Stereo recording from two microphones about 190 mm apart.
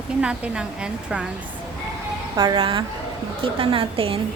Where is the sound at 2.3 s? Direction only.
20° right (ahead or behind).